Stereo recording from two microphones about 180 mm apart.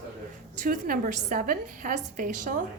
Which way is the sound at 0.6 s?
50° right (ahead or behind).